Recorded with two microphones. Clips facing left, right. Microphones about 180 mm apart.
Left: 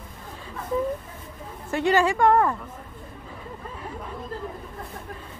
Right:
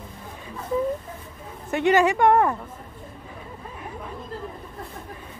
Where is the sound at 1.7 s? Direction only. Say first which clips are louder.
Right 2 dB; 20° right (ahead or behind).